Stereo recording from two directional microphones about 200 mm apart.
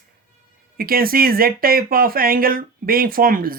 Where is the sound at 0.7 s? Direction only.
50° right (ahead or behind).